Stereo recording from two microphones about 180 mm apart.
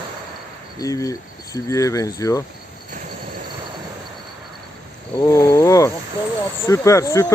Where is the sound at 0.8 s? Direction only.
20° left (ahead or behind).